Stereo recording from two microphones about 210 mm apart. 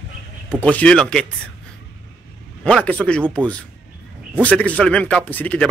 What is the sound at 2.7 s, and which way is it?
A man's voice, 5° left (ahead or behind).